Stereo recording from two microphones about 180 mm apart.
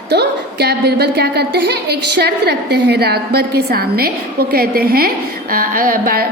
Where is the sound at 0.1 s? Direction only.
65° right (ahead or behind).